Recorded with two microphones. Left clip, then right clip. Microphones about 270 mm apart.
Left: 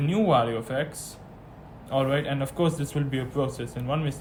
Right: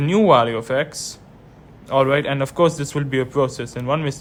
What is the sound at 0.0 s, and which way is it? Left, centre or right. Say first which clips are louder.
A man's voice: right 8 dB; right.